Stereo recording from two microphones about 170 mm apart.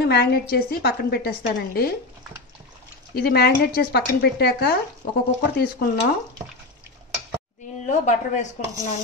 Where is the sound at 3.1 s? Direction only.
65° left (ahead or behind).